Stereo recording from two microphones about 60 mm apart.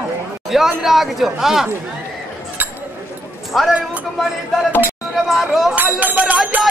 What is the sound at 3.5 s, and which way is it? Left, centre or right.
Speech, centre.